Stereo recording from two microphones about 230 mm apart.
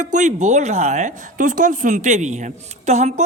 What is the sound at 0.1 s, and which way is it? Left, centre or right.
Speech, right.